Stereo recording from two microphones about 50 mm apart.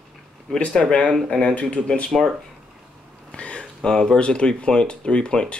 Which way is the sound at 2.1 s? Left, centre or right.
Centre.